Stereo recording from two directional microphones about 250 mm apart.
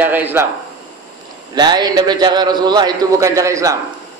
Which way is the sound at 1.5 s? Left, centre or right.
Centre.